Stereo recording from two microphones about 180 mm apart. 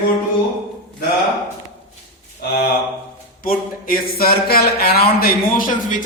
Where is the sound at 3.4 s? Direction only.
55° left (ahead or behind).